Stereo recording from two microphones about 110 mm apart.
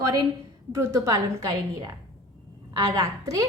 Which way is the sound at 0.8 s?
30° right (ahead or behind).